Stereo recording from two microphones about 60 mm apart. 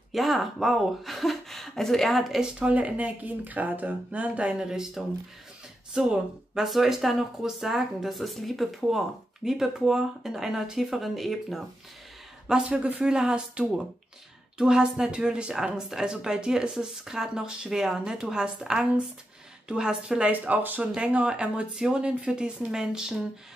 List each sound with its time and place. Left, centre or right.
0.1 s speech: centre
2.4 s speech: centre
4.6 s speech: centre
12.4 s speech: centre
20.2 s speech: right; by 23.2 s centre